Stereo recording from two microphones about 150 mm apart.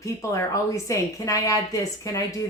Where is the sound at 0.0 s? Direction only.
20° left (ahead or behind).